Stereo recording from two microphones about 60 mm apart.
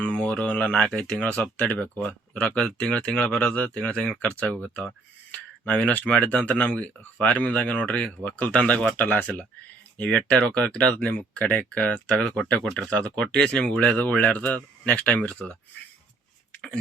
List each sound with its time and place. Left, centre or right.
0.0 s a sound: centre
1.2 s speech: left
10.9 s speech: left